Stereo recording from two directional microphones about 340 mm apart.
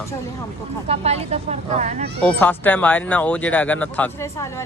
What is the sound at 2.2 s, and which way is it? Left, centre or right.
Speech, centre.